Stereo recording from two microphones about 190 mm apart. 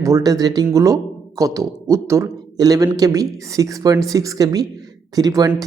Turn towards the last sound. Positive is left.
turn(degrees=-20)  # may be behind; listen again after turning